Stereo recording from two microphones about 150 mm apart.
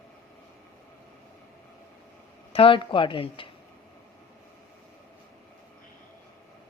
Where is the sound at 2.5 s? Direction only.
35° left (ahead or behind).